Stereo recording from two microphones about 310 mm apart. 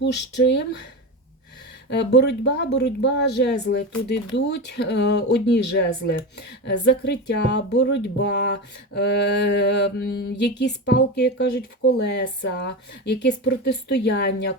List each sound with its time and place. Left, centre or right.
0.0 s speech: left
1.9 s speech: left